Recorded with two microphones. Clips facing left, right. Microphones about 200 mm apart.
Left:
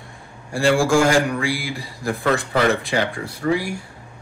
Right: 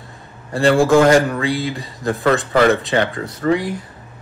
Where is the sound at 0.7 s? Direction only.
20° right (ahead or behind).